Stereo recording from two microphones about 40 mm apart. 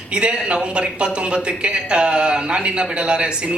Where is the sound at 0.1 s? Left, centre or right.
Right.